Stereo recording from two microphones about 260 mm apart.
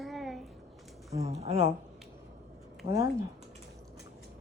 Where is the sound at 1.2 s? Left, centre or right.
Right.